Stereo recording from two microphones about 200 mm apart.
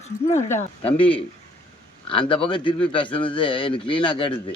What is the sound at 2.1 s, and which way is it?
Speech, 25° left (ahead or behind).